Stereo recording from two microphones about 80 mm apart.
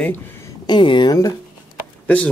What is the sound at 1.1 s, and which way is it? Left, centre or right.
Speech, left.